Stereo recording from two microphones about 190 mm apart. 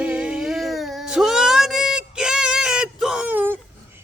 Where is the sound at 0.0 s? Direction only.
5° right (ahead or behind).